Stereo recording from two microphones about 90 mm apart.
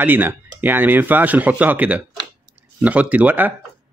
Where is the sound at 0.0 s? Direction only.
20° right (ahead or behind).